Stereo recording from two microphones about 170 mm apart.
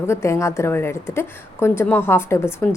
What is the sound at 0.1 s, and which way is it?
A woman's voice, 15° left (ahead or behind).